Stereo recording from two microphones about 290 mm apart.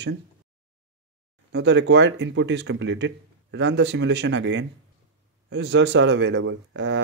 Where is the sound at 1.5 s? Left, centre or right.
Right.